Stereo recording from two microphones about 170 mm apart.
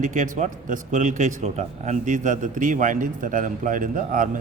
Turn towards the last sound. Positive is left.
turn(degrees=-50)  # may be behind; listen again after turning